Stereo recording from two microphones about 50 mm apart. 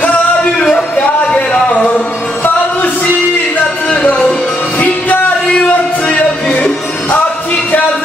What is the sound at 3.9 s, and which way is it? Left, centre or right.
Music, left.